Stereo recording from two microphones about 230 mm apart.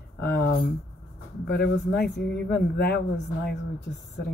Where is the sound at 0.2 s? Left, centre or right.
Left.